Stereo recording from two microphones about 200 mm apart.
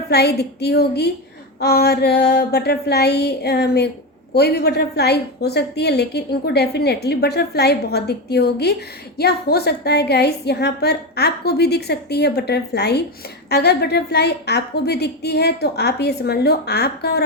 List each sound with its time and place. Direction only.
0.1 s a woman's voice: 55° left (ahead or behind)